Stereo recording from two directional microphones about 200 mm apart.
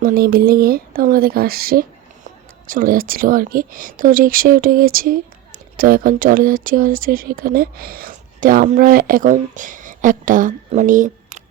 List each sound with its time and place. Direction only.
0.0 s speech: 45° right (ahead or behind)